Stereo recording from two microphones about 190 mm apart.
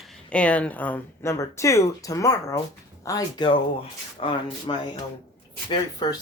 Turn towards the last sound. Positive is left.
turn(degrees=20)  # may be behind; listen again after turning